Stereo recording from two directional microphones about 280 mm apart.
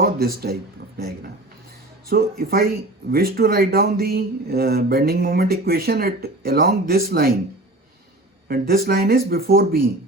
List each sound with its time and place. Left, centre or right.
0.0 s speech: right
2.0 s speech: right
8.4 s speech: right